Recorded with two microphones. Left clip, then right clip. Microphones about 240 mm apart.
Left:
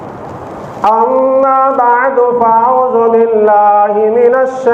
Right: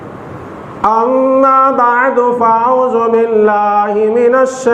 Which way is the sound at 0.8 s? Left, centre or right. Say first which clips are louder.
Left 2 dB; right.